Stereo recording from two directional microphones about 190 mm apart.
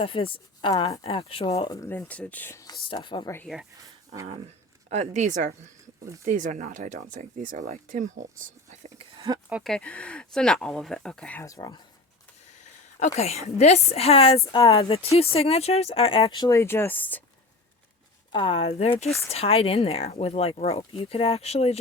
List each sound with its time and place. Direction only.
0.0 s speech: 30° left (ahead or behind)
1.7 s speech: 15° left (ahead or behind)
3.3 s speech: centre (ahead or behind)
3.8 s a sound: 20° right (ahead or behind)
4.9 s speech: 35° right (ahead or behind)
9.1 s a sound: 20° right (ahead or behind)
9.5 s speech: centre (ahead or behind); by 11.8 s 20° left (ahead or behind)
13.1 s speech: 35° left (ahead or behind)
14.3 s speech: 15° left (ahead or behind)
14.7 s speech: 30° left (ahead or behind); by 17.2 s 10° left (ahead or behind)
18.3 s speech: 25° left (ahead or behind)